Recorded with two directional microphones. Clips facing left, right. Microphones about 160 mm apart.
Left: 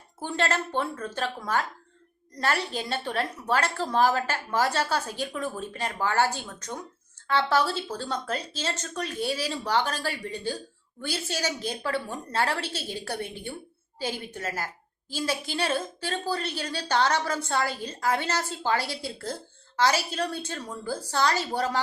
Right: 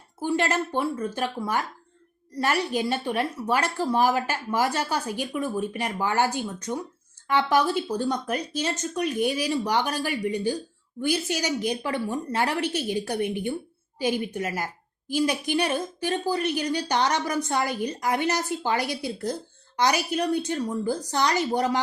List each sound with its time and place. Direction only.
0.2 s a woman's voice: 10° right (ahead or behind)